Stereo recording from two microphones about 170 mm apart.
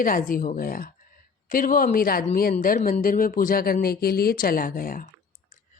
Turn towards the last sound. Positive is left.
turn(degrees=55)  # may be behind; listen again after turning